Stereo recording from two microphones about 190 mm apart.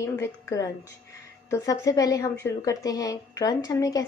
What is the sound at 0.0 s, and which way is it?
A woman's voice, 15° left (ahead or behind).